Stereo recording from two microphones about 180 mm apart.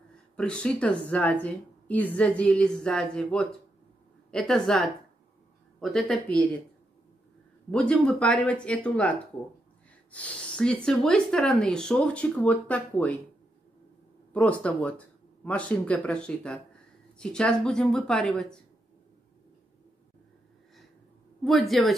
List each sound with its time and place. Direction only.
0.4 s a woman's voice: 5° left (ahead or behind)
7.7 s a woman's voice: 5° left (ahead or behind)
10.1 s speech: 5° left (ahead or behind)
14.3 s a woman's voice: 10° left (ahead or behind)
21.5 s speech: centre (ahead or behind)